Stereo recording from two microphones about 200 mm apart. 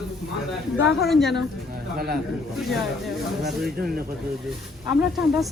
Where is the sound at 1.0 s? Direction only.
Centre (ahead or behind).